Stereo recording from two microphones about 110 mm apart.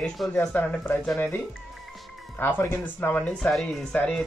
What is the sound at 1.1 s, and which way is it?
Speech, 25° left (ahead or behind).